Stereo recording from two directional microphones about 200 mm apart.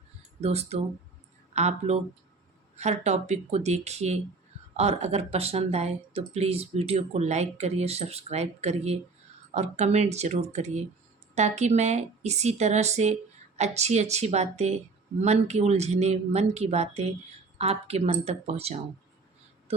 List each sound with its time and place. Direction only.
0.4 s speech: 30° right (ahead or behind)